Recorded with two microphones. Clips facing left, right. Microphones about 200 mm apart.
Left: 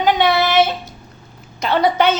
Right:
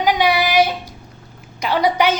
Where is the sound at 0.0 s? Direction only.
10° right (ahead or behind).